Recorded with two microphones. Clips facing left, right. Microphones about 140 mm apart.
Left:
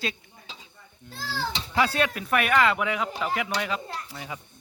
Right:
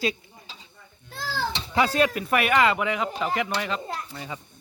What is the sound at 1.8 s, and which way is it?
Speech, centre (ahead or behind).